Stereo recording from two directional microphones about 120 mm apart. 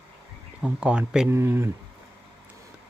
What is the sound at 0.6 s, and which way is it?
Speech, 10° right (ahead or behind).